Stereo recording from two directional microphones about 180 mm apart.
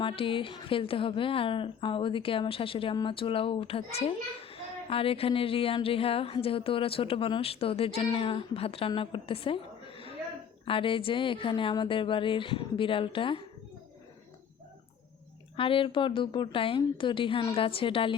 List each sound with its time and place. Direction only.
0.0 s a woman's voice: 30° left (ahead or behind)
15.5 s a woman's voice: 30° left (ahead or behind)